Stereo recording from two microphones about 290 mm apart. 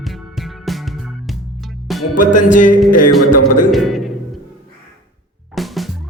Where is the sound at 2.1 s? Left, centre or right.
Left.